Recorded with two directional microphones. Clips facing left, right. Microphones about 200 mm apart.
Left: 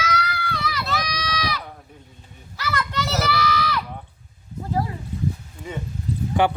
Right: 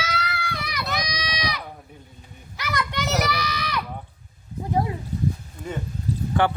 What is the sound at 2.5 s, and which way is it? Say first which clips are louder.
Children playing: left 1 dB; 15° right (ahead or behind).